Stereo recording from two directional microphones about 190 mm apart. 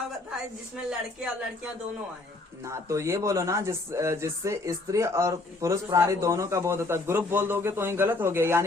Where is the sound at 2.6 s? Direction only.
15° right (ahead or behind).